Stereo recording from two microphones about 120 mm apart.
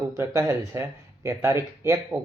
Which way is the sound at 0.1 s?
25° right (ahead or behind).